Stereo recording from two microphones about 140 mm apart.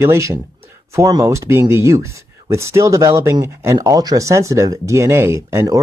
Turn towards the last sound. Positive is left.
turn(degrees=-20)  # may be behind; listen again after turning